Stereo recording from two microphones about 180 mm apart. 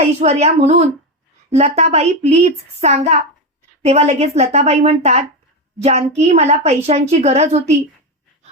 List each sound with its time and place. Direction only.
0.0 s a woman's voice: 35° right (ahead or behind)